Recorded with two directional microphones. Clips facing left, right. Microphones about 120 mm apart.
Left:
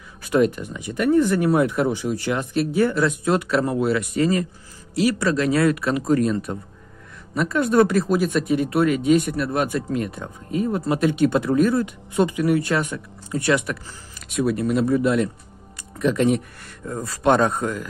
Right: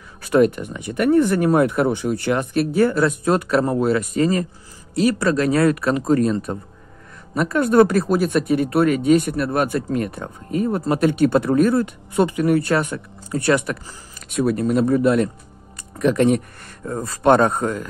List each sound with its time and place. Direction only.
0.2 s speech: 55° right (ahead or behind); by 6.3 s 40° right (ahead or behind)
7.3 s speech: 50° right (ahead or behind)